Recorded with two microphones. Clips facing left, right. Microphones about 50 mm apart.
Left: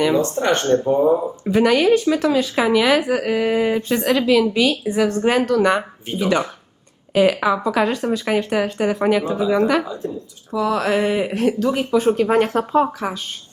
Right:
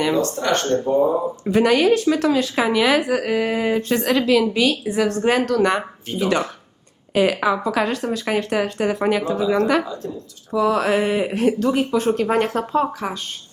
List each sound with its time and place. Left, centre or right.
0.2 s speech: left
1.5 s speech: centre
9.8 s speech: centre
10.5 s speech: centre